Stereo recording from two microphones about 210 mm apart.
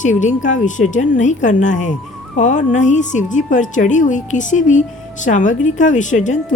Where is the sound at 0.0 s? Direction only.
35° left (ahead or behind).